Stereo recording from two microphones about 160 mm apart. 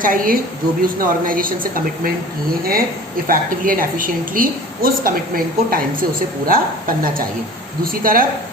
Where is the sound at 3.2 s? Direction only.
60° right (ahead or behind).